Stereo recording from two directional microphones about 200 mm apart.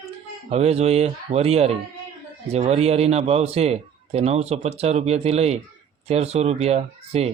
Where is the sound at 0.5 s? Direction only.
30° right (ahead or behind).